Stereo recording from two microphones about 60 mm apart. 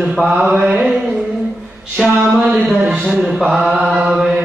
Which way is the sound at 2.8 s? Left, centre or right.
Centre.